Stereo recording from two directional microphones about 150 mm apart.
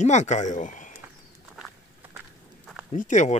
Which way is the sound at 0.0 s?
50° left (ahead or behind).